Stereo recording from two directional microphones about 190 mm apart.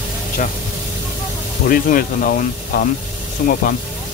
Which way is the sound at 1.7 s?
50° left (ahead or behind).